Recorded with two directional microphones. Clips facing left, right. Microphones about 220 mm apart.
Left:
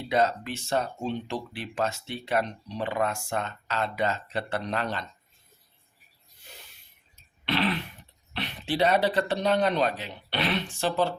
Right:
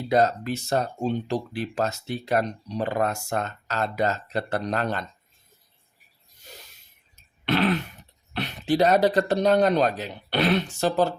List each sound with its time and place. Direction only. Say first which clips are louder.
0.1 s speech: right 4 dB; 40° right (ahead or behind)
7.4 s throat clearing: right 5 dB; 45° right (ahead or behind)
8.3 s speech: right 6 dB; 45° right (ahead or behind)